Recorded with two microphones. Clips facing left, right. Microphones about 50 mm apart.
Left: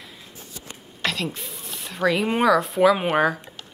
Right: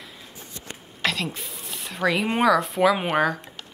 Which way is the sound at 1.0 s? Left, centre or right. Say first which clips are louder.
Even; centre.